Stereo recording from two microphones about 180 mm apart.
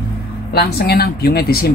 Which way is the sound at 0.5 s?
60° left (ahead or behind).